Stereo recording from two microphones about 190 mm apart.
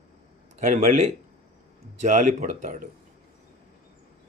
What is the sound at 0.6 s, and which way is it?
Speech, 45° right (ahead or behind).